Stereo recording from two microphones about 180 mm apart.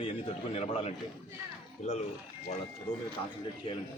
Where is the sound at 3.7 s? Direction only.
25° left (ahead or behind).